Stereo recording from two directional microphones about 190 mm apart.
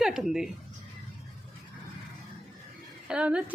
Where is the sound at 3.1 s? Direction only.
5° right (ahead or behind).